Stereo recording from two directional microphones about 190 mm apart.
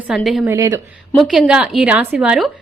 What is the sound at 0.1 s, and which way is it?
Speech, centre (ahead or behind).